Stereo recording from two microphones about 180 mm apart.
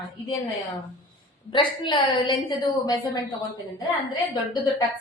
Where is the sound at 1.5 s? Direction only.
25° left (ahead or behind).